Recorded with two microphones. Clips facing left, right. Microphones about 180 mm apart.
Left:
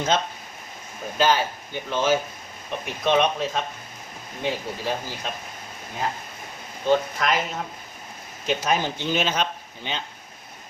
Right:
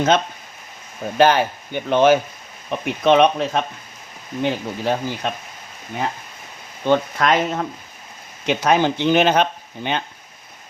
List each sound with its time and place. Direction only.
1.2 s speech: 60° right (ahead or behind)
6.8 s speech: 60° right (ahead or behind)
8.4 s speech: 70° right (ahead or behind)